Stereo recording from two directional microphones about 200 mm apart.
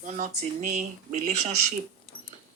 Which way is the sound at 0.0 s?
35° right (ahead or behind).